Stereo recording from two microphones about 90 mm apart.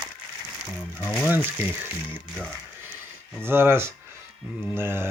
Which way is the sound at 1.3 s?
20° right (ahead or behind).